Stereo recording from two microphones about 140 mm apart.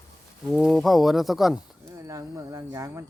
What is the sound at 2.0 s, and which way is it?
Speech, 20° right (ahead or behind).